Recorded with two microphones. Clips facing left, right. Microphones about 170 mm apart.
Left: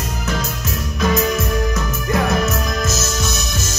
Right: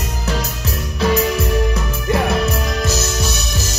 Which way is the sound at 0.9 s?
30° right (ahead or behind).